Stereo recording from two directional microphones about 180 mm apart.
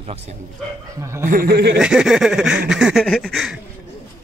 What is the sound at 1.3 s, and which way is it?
Speech, 55° right (ahead or behind).